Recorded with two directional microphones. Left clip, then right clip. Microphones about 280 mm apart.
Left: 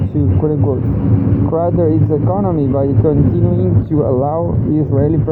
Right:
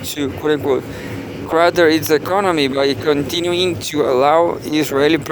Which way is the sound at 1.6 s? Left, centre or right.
Right.